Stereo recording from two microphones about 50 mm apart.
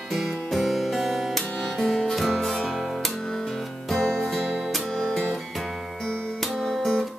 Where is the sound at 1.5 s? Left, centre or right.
Centre.